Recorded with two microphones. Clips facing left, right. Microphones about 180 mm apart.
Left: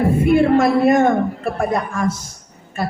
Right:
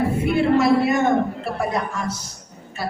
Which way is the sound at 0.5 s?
50° left (ahead or behind).